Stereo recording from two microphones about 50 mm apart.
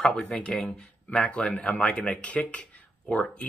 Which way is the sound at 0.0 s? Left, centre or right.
Centre.